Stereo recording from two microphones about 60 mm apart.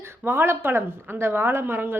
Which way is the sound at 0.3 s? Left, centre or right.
Right.